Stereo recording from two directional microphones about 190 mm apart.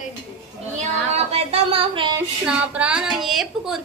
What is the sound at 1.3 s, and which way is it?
Speech, 30° right (ahead or behind).